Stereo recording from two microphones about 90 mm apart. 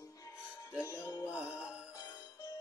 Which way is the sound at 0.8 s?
35° left (ahead or behind).